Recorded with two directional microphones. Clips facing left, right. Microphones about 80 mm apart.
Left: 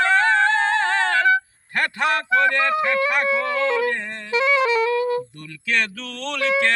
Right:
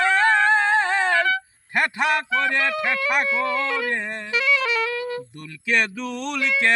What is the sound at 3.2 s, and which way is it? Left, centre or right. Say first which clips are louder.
Speech: left 2 dB; left.